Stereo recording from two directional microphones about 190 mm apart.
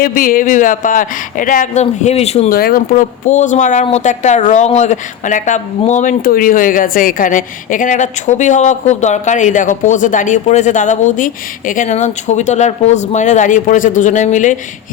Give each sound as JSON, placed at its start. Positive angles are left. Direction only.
{"t": 0.0, "sound": "speech", "side_deg": 50}
{"t": 2.5, "sound": "speech", "side_deg": 50}